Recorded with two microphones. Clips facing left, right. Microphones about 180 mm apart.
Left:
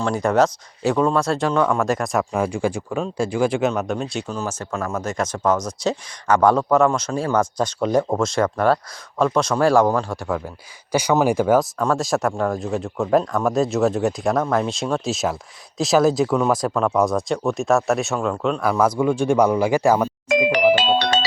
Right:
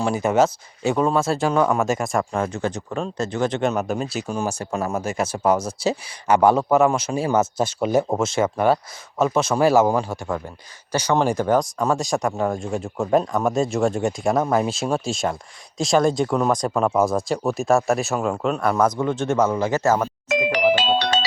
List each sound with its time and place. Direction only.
0.0 s speech: 5° right (ahead or behind)
3.7 s speech: 5° right (ahead or behind)
11.8 s speech: centre (ahead or behind)
20.2 s music: 50° left (ahead or behind)